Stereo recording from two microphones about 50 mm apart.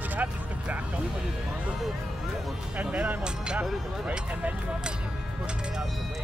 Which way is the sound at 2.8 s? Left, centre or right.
Right.